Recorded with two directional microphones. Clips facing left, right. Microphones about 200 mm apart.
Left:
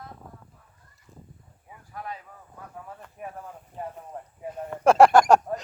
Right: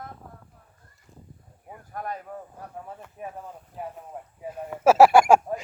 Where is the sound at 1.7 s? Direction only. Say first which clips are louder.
Right 4 dB; 50° right (ahead or behind).